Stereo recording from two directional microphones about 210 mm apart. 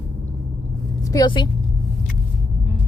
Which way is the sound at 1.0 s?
20° left (ahead or behind).